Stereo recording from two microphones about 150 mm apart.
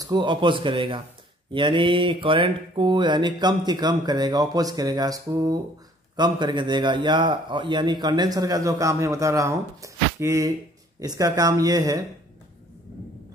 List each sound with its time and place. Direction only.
0.0 s a man's voice: 30° right (ahead or behind)